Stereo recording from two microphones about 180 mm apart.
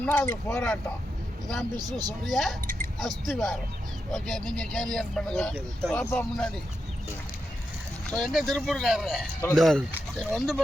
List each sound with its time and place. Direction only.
0.0 s speech: 15° left (ahead or behind)
1.7 s speech: 20° right (ahead or behind)
2.2 s speech: centre (ahead or behind)
8.0 s speech: centre (ahead or behind)